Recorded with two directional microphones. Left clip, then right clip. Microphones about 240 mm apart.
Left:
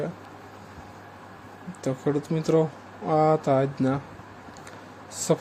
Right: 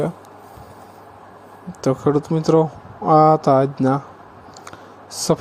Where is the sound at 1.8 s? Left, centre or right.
Right.